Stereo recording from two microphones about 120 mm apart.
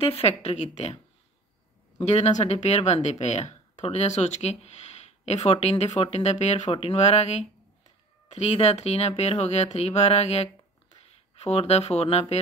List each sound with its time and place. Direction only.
0.0 s speech: 55° left (ahead or behind)
2.0 s speech: 70° left (ahead or behind)
6.7 s speech: 50° left (ahead or behind)
8.4 s speech: 60° left (ahead or behind)